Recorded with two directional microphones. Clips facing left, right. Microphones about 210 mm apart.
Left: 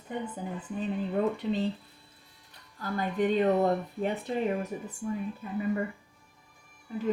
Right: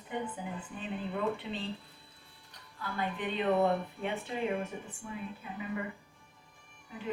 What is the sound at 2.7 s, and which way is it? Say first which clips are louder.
Speech: left 7 dB; 40° left (ahead or behind).